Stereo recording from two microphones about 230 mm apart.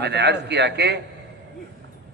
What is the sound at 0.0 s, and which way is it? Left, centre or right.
A man's voice, right.